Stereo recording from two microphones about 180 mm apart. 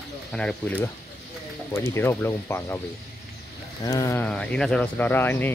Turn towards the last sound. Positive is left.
turn(degrees=10)  # may be behind; listen again after turning